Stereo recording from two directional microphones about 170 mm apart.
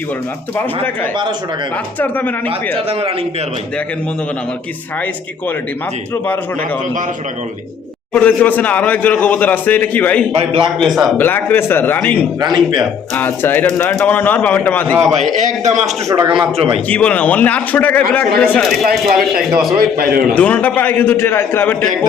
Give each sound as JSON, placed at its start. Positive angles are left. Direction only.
{"t": 2.0, "sound": "a man's voice", "side_deg": 10}
{"t": 2.7, "sound": "speech", "side_deg": -30}
{"t": 8.1, "sound": "a man's voice", "side_deg": 10}
{"t": 10.3, "sound": "speech", "side_deg": -35}
{"t": 10.8, "sound": "speech", "side_deg": 0}
{"t": 11.2, "sound": "a man's voice", "side_deg": 10}
{"t": 12.4, "sound": "a man's voice", "side_deg": -25}
{"t": 13.1, "sound": "a man's voice", "side_deg": 10}
{"t": 15.4, "sound": "a man's voice", "side_deg": -45}
{"t": 16.3, "sound": "speech", "side_deg": -30}
{"t": 16.9, "sound": "a man's voice", "side_deg": 10}
{"t": 20.0, "sound": "a man's voice", "side_deg": -60}
{"t": 20.3, "sound": "a man's voice", "side_deg": 10}